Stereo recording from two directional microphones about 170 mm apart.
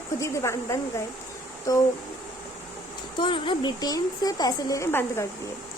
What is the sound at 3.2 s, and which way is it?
A woman's voice, 30° left (ahead or behind).